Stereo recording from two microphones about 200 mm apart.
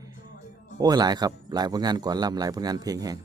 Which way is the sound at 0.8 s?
20° right (ahead or behind).